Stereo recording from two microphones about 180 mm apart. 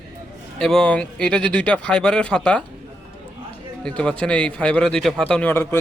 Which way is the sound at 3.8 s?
5° left (ahead or behind).